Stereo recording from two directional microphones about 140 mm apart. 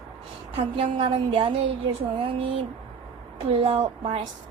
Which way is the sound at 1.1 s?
40° right (ahead or behind).